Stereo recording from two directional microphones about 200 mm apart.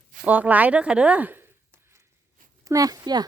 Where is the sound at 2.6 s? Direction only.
15° right (ahead or behind).